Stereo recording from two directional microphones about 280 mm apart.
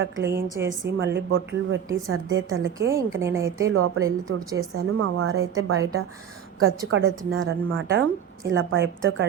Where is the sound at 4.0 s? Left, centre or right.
Centre.